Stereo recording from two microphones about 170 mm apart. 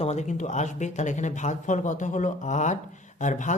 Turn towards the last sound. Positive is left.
turn(degrees=45)  # may be behind; listen again after turning